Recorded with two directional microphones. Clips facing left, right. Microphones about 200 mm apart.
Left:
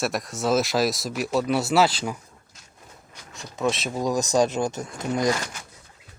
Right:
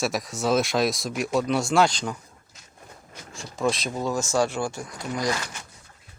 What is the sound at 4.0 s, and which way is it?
Speech, 15° left (ahead or behind).